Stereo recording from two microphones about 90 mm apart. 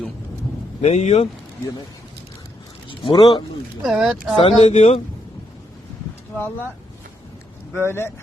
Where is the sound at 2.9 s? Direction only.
75° left (ahead or behind).